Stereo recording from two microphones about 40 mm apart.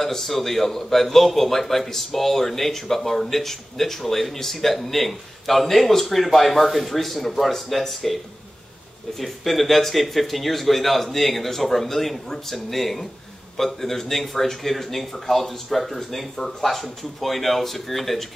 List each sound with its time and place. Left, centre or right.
0.0 s a man's voice: centre
9.2 s a man's voice: centre